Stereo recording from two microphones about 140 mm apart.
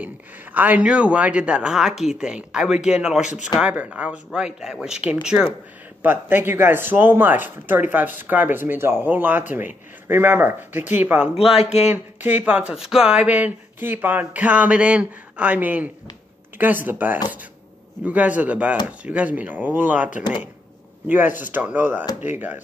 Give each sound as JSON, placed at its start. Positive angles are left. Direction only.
{"t": 0.0, "sound": "speech", "side_deg": -10}
{"t": 11.3, "sound": "speech", "side_deg": 45}
{"t": 11.9, "sound": "speech", "side_deg": -15}
{"t": 21.1, "sound": "speech", "side_deg": -15}